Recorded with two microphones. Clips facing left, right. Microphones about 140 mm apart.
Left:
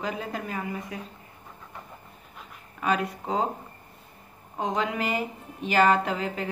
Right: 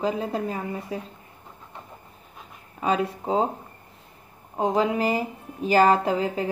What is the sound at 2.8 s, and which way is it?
Speech, 30° right (ahead or behind).